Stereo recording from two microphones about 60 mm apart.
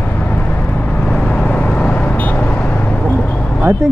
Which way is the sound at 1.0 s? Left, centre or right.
Centre.